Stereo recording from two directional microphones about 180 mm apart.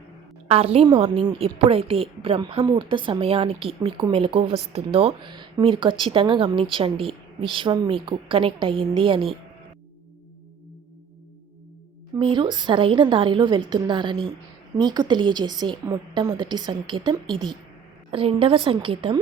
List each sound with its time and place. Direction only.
0.4 s a woman's voice: 35° right (ahead or behind)
12.2 s a woman's voice: 25° right (ahead or behind)